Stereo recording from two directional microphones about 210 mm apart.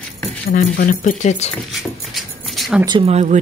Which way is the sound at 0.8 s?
35° left (ahead or behind).